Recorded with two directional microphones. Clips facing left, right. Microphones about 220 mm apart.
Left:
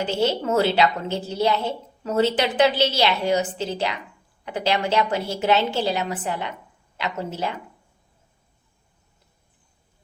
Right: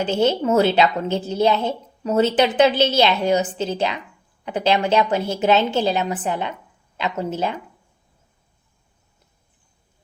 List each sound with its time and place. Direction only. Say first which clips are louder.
0.0 s a woman's voice: right 4 dB; 20° right (ahead or behind)